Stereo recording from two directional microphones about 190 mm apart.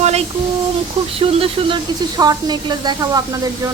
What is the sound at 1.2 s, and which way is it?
Speech, 25° right (ahead or behind).